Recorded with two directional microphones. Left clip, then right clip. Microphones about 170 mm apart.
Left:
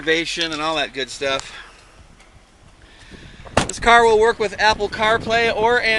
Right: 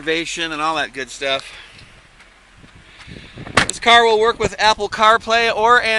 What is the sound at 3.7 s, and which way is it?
Speech, centre (ahead or behind).